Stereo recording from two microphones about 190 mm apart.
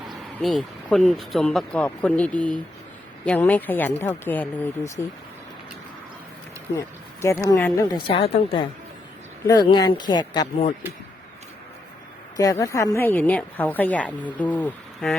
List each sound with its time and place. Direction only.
0.4 s a woman's voice: centre (ahead or behind)
6.7 s a sound: 15° left (ahead or behind)
7.5 s a woman's voice: 15° left (ahead or behind)
8.0 s speech: 30° left (ahead or behind)
12.4 s a woman's voice: 15° left (ahead or behind)